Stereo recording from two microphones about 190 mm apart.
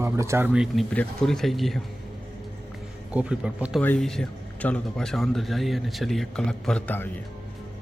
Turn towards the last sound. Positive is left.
turn(degrees=10)  # may be behind; listen again after turning